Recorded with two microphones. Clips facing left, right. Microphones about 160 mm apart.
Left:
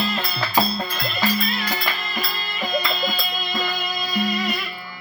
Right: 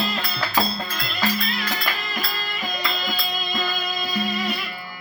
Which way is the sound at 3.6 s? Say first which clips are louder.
Left 1 dB; 15° left (ahead or behind).